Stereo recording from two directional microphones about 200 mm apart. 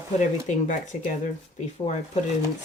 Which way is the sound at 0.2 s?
40° left (ahead or behind).